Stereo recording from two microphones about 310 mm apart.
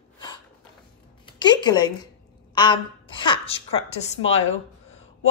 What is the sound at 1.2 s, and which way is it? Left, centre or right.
A woman's voice, centre.